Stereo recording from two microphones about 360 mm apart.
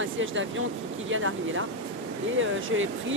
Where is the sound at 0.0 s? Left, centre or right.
Right.